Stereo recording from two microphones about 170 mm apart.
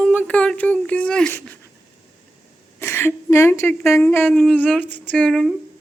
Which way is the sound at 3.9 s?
10° left (ahead or behind).